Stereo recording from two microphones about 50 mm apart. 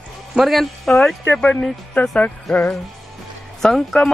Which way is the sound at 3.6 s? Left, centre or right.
Centre.